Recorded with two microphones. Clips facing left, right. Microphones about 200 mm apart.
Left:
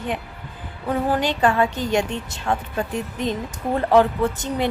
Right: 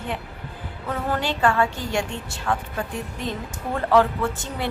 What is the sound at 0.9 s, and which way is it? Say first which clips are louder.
A woman's voice: left 4 dB; 15° left (ahead or behind).